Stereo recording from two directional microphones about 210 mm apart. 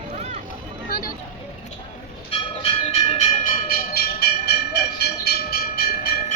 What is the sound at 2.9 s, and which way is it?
Train, 35° left (ahead or behind).